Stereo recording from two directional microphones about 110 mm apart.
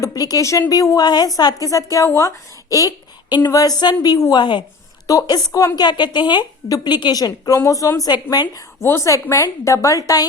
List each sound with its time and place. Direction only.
0.0 s a woman's voice: 35° left (ahead or behind)
8.8 s a woman's voice: 25° left (ahead or behind)